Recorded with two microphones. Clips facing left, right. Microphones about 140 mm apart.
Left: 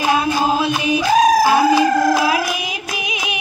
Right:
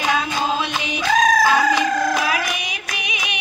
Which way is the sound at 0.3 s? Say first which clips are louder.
Left 5 dB; 5° left (ahead or behind).